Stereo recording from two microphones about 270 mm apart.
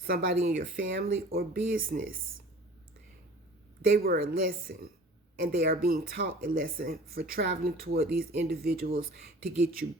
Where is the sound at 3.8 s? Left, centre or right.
Right.